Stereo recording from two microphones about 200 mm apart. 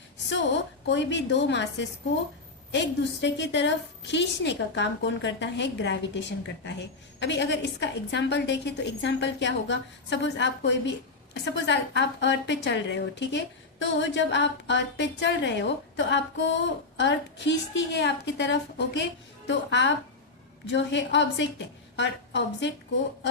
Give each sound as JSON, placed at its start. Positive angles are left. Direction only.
{"t": 0.9, "sound": "a woman's voice", "side_deg": 60}